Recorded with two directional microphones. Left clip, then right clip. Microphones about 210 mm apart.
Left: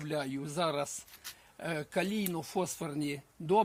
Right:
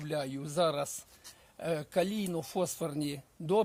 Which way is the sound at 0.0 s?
40° right (ahead or behind).